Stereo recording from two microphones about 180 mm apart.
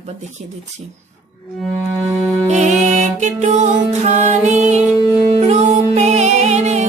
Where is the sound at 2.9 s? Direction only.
40° right (ahead or behind).